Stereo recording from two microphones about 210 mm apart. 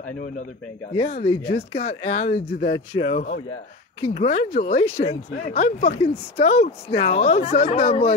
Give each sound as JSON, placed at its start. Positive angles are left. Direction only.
{"t": 0.9, "sound": "speech", "side_deg": 30}